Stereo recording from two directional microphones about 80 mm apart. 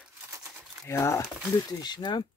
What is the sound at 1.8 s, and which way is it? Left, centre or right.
Speech, left.